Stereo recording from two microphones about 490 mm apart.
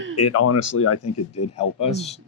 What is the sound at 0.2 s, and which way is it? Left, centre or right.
Speech, left.